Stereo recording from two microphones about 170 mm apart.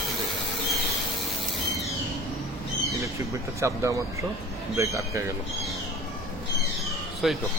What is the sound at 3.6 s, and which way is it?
Speech, 15° right (ahead or behind).